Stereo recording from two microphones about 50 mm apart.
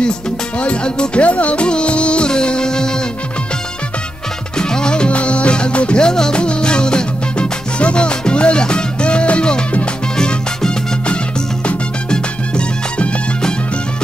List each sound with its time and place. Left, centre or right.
0.6 s music: left
4.6 s music: centre